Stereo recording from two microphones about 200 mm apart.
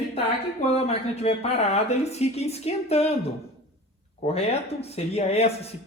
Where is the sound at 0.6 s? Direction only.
30° left (ahead or behind).